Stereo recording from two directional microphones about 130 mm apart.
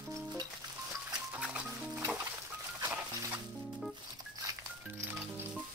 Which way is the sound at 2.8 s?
20° right (ahead or behind).